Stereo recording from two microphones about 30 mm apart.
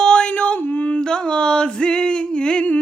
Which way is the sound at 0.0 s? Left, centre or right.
Left.